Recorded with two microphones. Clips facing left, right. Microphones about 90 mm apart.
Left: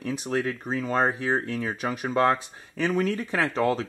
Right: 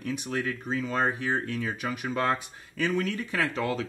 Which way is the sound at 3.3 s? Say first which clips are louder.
Left 4 dB; 35° left (ahead or behind).